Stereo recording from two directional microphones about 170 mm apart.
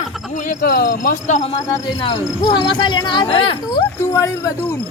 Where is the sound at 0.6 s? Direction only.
75° left (ahead or behind); by 1.5 s 45° left (ahead or behind).